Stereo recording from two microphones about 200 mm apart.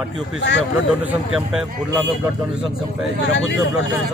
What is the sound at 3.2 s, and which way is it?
Speech, 60° left (ahead or behind).